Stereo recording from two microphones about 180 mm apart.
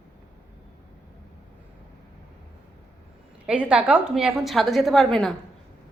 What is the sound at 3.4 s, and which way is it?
A woman's voice, 5° right (ahead or behind).